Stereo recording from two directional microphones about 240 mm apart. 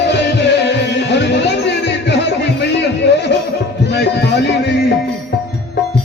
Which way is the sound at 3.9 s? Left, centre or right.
Left.